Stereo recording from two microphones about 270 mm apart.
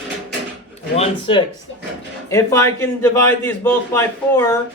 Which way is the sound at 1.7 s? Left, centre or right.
Left.